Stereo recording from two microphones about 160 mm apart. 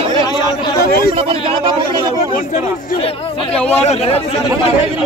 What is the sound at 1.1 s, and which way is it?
Speech, 35° right (ahead or behind).